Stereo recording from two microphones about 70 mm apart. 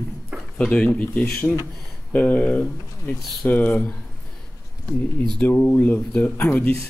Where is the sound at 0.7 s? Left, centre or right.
Centre.